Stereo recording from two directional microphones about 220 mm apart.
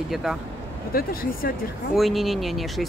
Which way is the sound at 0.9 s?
40° left (ahead or behind).